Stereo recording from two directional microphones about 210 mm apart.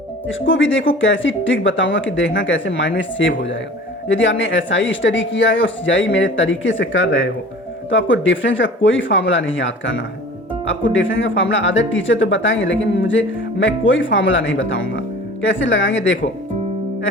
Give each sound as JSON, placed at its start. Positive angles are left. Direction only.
{"t": 0.3, "sound": "speech", "side_deg": 65}